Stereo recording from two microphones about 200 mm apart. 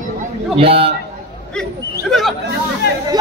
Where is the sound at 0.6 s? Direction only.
30° right (ahead or behind).